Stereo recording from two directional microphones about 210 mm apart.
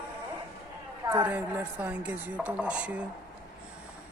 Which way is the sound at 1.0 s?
10° right (ahead or behind).